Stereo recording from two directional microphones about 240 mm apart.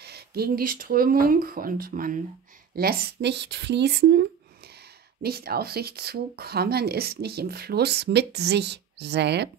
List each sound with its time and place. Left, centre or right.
0.0 s speech: right